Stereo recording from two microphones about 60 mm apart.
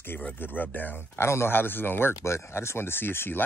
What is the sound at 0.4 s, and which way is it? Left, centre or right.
Speech, left.